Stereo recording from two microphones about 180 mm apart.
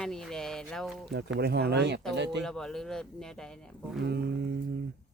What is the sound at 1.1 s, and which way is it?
Speech, 65° right (ahead or behind).